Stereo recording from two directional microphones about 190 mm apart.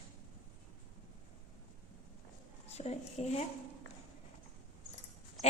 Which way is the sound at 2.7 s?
35° left (ahead or behind).